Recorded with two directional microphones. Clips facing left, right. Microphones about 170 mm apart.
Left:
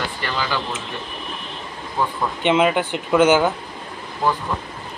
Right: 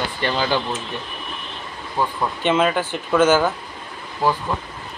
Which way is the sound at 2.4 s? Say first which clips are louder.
Left 2 dB; 15° left (ahead or behind).